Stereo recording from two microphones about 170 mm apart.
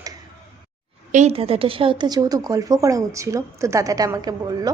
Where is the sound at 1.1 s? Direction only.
35° right (ahead or behind); by 4.7 s 20° right (ahead or behind).